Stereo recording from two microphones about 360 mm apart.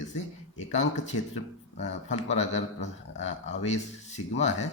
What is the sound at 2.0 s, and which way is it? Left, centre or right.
Speech, centre.